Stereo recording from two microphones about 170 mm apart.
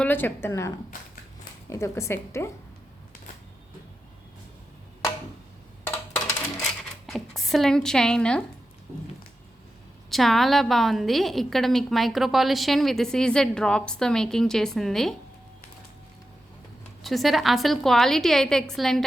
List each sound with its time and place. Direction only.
0.0 s a woman's voice: 10° left (ahead or behind)
1.7 s a woman's voice: 15° left (ahead or behind)
7.1 s a woman's voice: centre (ahead or behind)
10.1 s a woman's voice: centre (ahead or behind)
17.0 s a woman's voice: centre (ahead or behind)